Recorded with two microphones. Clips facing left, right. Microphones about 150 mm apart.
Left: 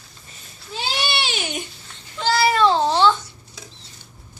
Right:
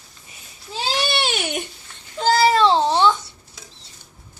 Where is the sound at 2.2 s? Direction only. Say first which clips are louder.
Right 2 dB; 40° right (ahead or behind); by 3.1 s 20° right (ahead or behind).